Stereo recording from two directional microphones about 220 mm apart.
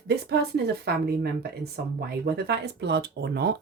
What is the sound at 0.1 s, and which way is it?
Speech, 50° right (ahead or behind).